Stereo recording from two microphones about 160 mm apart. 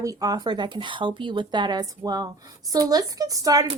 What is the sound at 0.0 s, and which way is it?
Speech, 20° right (ahead or behind).